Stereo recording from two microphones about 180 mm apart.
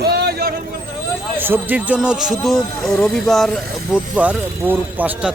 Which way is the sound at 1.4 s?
10° right (ahead or behind).